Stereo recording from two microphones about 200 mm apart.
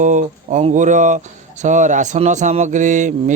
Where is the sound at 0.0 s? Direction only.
40° right (ahead or behind).